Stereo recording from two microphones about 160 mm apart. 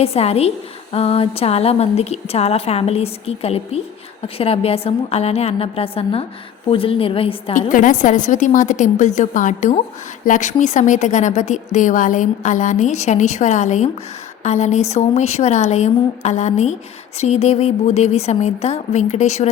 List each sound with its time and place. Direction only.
0.0 s a woman's voice: 40° left (ahead or behind)
7.5 s a woman's voice: 55° left (ahead or behind)